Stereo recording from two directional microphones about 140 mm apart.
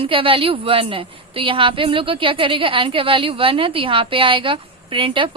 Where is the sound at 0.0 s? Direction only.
40° right (ahead or behind).